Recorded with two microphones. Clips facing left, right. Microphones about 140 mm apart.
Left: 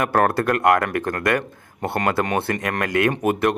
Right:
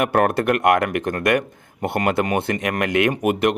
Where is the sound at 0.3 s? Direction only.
20° right (ahead or behind).